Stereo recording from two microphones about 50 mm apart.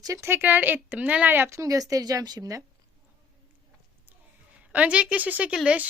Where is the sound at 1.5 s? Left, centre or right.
Right.